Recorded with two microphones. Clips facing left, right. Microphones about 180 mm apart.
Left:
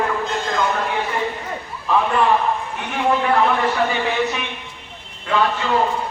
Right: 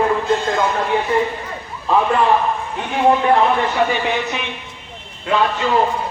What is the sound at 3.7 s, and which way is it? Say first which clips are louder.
Speech: right 2 dB; 15° right (ahead or behind).